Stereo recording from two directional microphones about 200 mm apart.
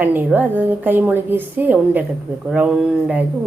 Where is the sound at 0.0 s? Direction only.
10° right (ahead or behind).